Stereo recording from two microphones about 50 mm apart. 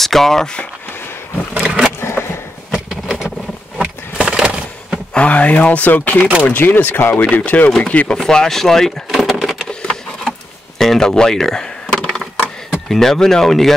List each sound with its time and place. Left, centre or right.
0.0 s speech: centre
1.6 s vehicle: centre
2.0 s a sound: left
2.7 s vehicle: centre
5.1 s speech: left
7.4 s speech: left
8.2 s speech: centre
9.1 s a sound: centre
10.8 s a sound: centre
12.7 s speech: centre